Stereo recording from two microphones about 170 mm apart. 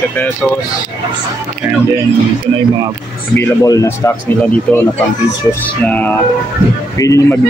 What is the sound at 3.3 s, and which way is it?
Speech, 20° left (ahead or behind).